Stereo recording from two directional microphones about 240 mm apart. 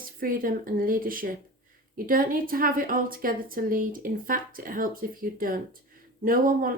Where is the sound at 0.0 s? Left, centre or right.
Right.